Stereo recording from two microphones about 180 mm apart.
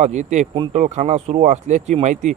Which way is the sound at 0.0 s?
40° right (ahead or behind).